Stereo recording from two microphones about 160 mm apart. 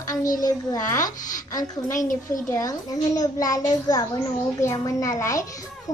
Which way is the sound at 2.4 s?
20° left (ahead or behind).